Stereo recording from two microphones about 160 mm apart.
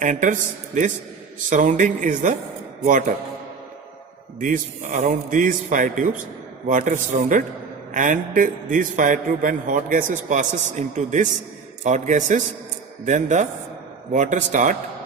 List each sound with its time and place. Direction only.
0.0 s a man's voice: 55° right (ahead or behind)
4.4 s a man's voice: 55° right (ahead or behind)